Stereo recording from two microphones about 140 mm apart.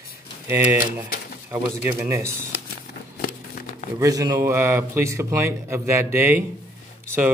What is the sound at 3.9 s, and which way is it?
A man's voice, 25° right (ahead or behind).